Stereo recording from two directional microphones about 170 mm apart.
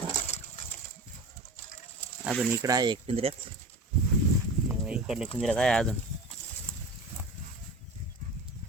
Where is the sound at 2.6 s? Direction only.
20° right (ahead or behind).